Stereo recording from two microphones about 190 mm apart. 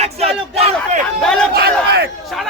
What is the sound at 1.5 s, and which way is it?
Speech, 60° right (ahead or behind).